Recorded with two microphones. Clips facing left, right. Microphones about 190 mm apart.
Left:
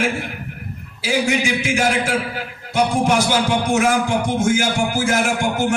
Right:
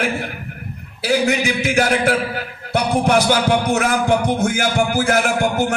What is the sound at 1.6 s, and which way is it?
A man's voice, 60° right (ahead or behind).